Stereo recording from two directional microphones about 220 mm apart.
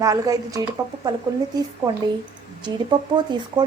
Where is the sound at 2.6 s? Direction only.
20° right (ahead or behind).